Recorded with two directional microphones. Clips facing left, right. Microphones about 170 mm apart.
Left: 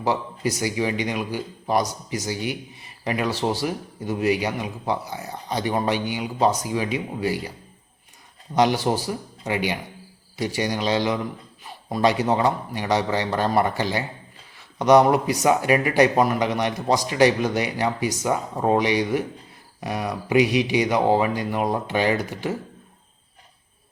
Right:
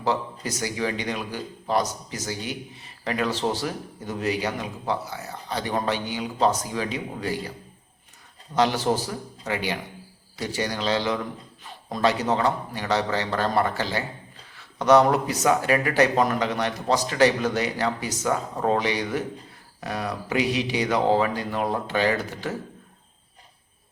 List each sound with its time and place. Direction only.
0.0 s speech: 10° left (ahead or behind)
8.5 s speech: 15° left (ahead or behind)